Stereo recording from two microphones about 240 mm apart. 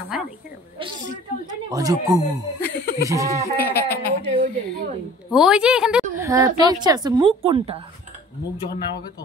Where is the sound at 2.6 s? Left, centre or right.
Left.